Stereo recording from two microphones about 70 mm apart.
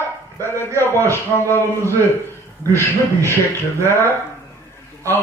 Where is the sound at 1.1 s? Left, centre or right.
Left.